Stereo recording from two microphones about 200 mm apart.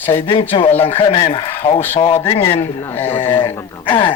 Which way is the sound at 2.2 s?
25° left (ahead or behind).